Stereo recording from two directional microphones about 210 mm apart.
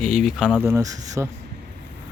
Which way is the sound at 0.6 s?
15° right (ahead or behind).